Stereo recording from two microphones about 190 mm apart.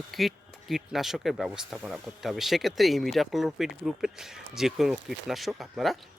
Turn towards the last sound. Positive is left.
turn(degrees=0)  # may be behind; listen again after turning